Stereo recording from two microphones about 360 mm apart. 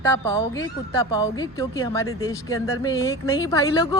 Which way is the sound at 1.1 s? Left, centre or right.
Centre.